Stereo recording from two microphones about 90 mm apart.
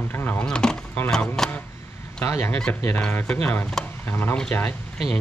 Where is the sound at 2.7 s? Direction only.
20° left (ahead or behind).